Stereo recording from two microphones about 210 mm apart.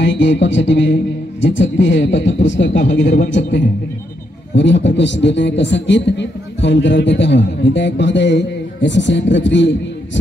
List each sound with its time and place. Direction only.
0.0 s a man's voice: 60° left (ahead or behind)
4.6 s a man's voice: 55° left (ahead or behind)